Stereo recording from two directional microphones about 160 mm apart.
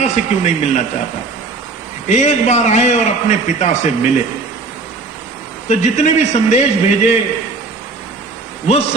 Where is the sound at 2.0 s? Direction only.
45° left (ahead or behind).